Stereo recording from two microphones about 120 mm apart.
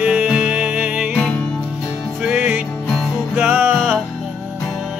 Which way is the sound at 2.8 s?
5° left (ahead or behind).